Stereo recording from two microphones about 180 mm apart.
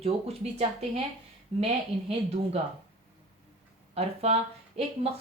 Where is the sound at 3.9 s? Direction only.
35° right (ahead or behind).